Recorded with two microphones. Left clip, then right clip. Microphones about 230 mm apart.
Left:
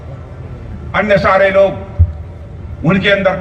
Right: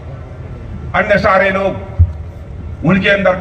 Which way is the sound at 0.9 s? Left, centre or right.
Left.